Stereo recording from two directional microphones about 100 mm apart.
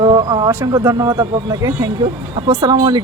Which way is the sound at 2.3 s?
50° right (ahead or behind).